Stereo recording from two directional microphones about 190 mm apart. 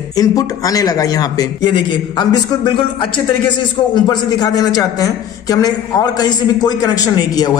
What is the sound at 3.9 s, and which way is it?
A man's voice, 20° left (ahead or behind).